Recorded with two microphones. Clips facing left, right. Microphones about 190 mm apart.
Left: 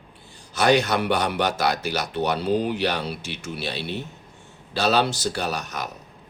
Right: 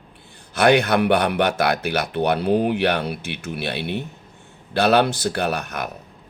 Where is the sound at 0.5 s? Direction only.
60° right (ahead or behind).